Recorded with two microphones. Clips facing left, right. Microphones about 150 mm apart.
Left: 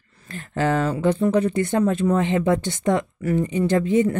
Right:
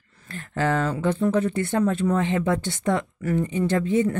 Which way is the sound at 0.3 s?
15° left (ahead or behind).